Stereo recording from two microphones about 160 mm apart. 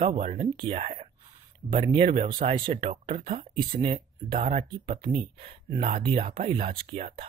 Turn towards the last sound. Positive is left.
turn(degrees=-40)  # may be behind; listen again after turning